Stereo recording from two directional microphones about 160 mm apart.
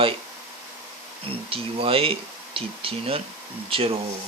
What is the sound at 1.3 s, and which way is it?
Speech, 35° right (ahead or behind).